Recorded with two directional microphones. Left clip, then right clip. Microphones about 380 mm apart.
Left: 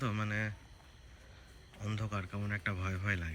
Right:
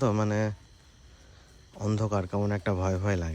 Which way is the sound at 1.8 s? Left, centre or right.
Centre.